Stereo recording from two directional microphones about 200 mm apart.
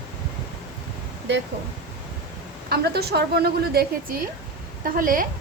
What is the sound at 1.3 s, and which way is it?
Speech, 60° right (ahead or behind).